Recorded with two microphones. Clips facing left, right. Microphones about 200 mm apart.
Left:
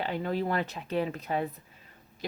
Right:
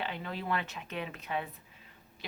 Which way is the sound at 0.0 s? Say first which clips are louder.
Left 8 dB; 40° left (ahead or behind).